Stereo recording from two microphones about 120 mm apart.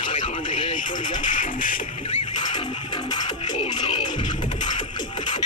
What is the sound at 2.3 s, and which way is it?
Music, 40° left (ahead or behind).